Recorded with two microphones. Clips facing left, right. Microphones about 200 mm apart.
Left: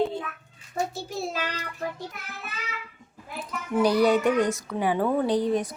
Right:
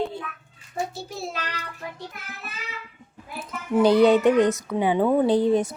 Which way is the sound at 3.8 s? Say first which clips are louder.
Right 5 dB; 25° right (ahead or behind).